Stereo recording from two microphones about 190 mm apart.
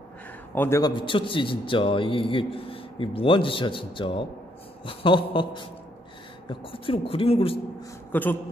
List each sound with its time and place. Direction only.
0.6 s a man's voice: 15° left (ahead or behind)
8.1 s a man's voice: 10° left (ahead or behind)